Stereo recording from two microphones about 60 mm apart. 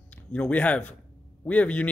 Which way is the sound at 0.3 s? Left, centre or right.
Left.